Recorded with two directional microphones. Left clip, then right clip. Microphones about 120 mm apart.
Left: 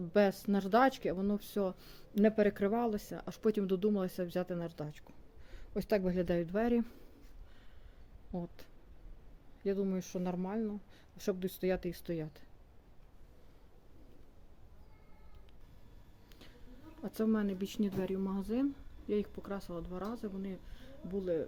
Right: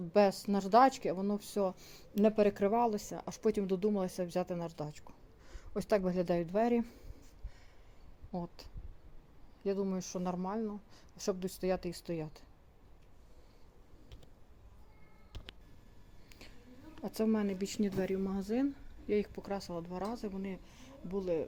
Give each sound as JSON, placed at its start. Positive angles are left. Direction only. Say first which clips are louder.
{"t": 0.1, "sound": "speech", "louder": "right 2 dB", "side_deg": 30}
{"t": 8.3, "sound": "speech", "louder": "right 2 dB", "side_deg": 25}
{"t": 9.6, "sound": "speech", "louder": "even", "side_deg": 35}
{"t": 17.0, "sound": "speech", "louder": "right 1 dB", "side_deg": 10}
{"t": 20.7, "sound": "a sound", "louder": "right 1 dB", "side_deg": 20}